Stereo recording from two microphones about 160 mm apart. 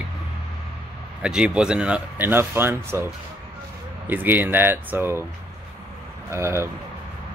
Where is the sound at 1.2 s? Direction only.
5° right (ahead or behind).